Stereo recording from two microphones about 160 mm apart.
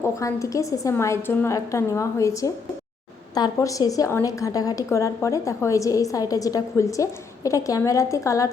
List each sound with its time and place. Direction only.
0.0 s a woman's voice: 20° left (ahead or behind)